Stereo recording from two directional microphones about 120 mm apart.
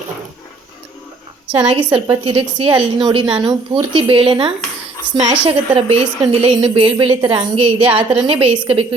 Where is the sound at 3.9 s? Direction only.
50° right (ahead or behind).